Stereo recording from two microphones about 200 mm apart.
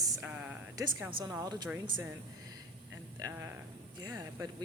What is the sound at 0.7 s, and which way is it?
Speech, 20° right (ahead or behind).